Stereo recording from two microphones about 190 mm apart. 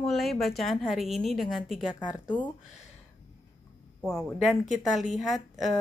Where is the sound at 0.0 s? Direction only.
Centre (ahead or behind).